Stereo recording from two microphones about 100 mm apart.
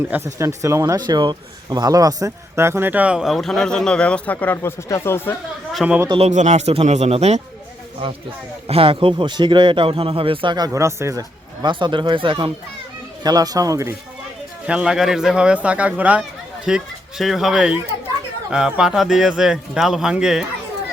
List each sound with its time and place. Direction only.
0.3 s speech: 30° right (ahead or behind)
0.9 s a man's voice: 45° right (ahead or behind); by 5.4 s 25° left (ahead or behind)
5.8 s a man's voice: centre (ahead or behind)
6.1 s speech: 85° right
8.6 s speech: 70° right (ahead or behind); by 10.7 s 50° right (ahead or behind)
10.7 s a man's voice: 30° right (ahead or behind)
11.7 s speech: 55° right (ahead or behind)
13.2 s speech: 40° right (ahead or behind)
14.7 s a man's voice: 10° right (ahead or behind)